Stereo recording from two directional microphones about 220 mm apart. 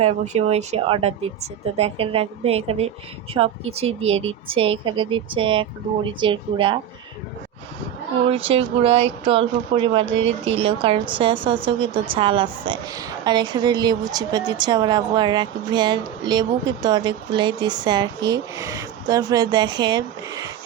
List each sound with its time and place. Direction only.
0.0 s a woman's voice: 30° right (ahead or behind)
8.3 s a woman's voice: 25° right (ahead or behind)
10.2 s speech: 60° right (ahead or behind)
10.6 s a woman's voice: 25° right (ahead or behind)